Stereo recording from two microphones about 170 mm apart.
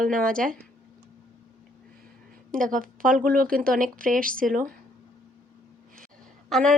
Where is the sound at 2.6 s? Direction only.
50° right (ahead or behind).